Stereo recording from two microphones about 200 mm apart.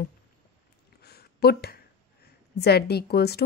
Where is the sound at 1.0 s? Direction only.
50° left (ahead or behind).